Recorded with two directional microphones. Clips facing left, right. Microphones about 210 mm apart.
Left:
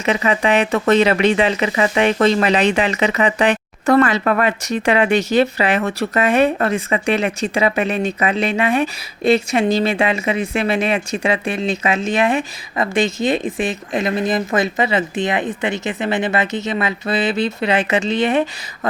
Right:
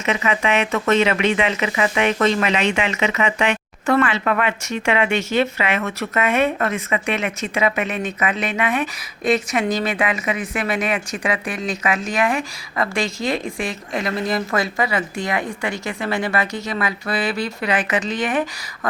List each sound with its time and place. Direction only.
0.0 s speech: 35° left (ahead or behind)